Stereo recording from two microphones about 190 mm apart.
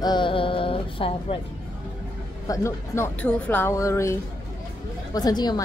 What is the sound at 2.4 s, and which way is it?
A woman's voice, 15° left (ahead or behind).